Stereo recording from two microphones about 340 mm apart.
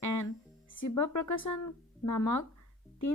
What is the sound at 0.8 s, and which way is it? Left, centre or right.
Speech, left.